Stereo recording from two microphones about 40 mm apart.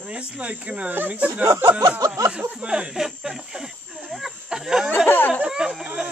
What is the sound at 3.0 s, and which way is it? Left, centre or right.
Speech, centre.